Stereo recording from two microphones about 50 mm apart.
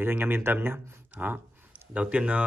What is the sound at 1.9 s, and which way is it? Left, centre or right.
Speech, right.